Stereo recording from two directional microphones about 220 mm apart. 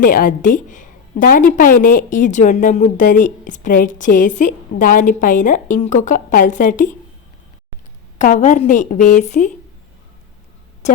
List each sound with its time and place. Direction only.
0.0 s a woman's voice: 40° left (ahead or behind)
8.2 s a woman's voice: 35° left (ahead or behind)
10.8 s a sound: 30° left (ahead or behind)